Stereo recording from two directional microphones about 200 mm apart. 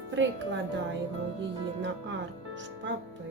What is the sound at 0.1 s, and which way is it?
Speech, 65° right (ahead or behind).